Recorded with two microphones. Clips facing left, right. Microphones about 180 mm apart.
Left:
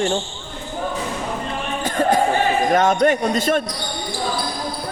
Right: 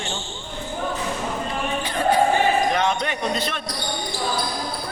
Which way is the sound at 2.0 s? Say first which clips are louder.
Left 3 dB; 45° left (ahead or behind).